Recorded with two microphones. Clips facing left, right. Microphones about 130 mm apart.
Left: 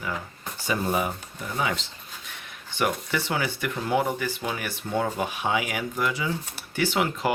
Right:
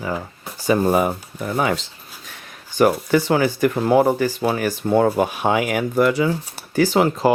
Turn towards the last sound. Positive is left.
turn(degrees=-35)  # may be behind; listen again after turning